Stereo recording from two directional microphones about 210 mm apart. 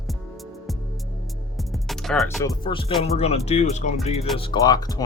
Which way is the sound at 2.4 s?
20° left (ahead or behind).